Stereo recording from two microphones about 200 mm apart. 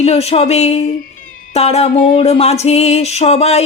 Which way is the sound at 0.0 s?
30° left (ahead or behind).